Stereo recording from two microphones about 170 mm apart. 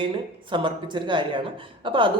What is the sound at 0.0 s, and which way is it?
Speech, 30° right (ahead or behind).